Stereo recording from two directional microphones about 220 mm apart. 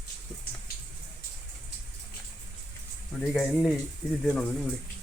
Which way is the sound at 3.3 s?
Centre (ahead or behind).